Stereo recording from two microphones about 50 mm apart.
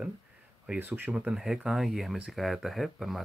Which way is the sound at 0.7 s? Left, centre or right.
Right.